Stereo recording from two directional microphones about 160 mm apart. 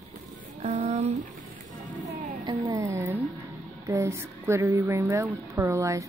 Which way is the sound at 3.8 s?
15° right (ahead or behind).